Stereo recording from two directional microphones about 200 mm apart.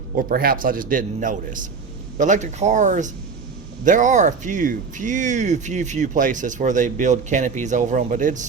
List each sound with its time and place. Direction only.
0.2 s a man's voice: 45° right (ahead or behind)